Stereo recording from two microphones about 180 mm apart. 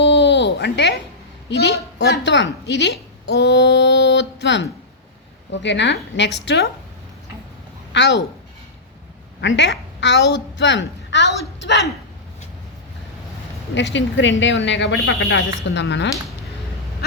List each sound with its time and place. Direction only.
0.0 s a sound: 75° left (ahead or behind)
1.5 s a woman's voice: 65° left (ahead or behind)
7.9 s a woman's voice: 75° left (ahead or behind)
9.4 s a woman's voice: 90° left
13.7 s a woman's voice: 90° left